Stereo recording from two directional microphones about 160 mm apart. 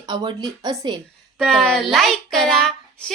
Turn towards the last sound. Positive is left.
turn(degrees=5)  # may be behind; listen again after turning